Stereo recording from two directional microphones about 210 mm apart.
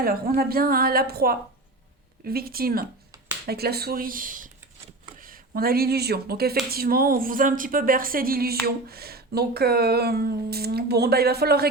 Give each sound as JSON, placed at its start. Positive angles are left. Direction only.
{"t": 0.3, "sound": "speech", "side_deg": -45}